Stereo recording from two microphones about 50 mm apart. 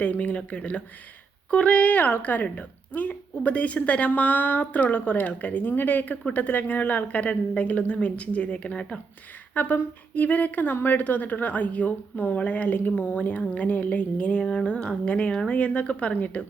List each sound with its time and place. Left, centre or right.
0.0 s a woman's voice: left
9.6 s a woman's voice: left